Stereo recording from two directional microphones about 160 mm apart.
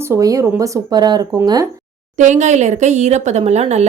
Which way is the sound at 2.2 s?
50° right (ahead or behind).